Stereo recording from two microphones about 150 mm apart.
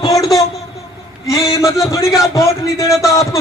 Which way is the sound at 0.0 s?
25° left (ahead or behind).